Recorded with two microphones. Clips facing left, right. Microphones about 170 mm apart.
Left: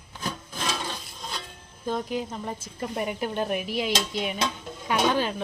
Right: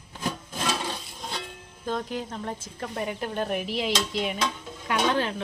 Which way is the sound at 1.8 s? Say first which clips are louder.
Left 2 dB; 5° left (ahead or behind).